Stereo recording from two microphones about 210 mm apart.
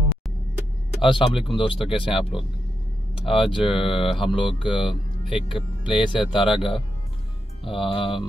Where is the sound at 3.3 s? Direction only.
25° left (ahead or behind).